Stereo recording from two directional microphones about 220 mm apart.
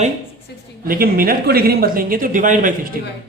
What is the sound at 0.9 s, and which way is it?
Speech, 45° right (ahead or behind).